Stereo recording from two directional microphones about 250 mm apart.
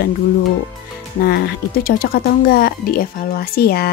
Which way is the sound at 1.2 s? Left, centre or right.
Left.